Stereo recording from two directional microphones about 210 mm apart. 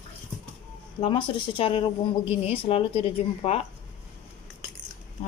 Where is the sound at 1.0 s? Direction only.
25° left (ahead or behind).